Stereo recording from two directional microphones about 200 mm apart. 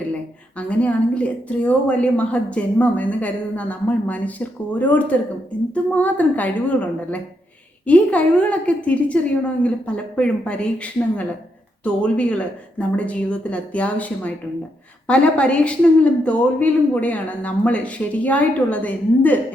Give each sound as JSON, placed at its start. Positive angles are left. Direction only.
{"t": 0.5, "sound": "a woman's voice", "side_deg": 5}